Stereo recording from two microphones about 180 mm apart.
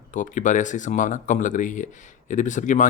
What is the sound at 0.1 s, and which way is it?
Speech, 45° left (ahead or behind).